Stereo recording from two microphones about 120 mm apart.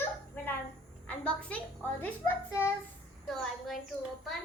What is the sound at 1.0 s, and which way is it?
A woman's voice, 10° left (ahead or behind).